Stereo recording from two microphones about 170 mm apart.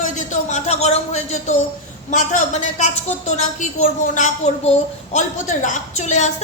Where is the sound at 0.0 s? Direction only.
45° left (ahead or behind).